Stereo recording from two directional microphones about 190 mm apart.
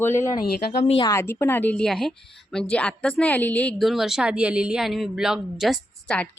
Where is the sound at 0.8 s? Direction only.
30° left (ahead or behind).